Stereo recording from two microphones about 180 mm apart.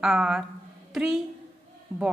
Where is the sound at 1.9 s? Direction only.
15° right (ahead or behind).